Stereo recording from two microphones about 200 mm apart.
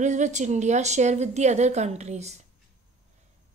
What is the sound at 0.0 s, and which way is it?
Speech, 35° right (ahead or behind).